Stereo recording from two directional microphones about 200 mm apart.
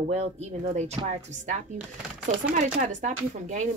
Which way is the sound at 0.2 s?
30° right (ahead or behind).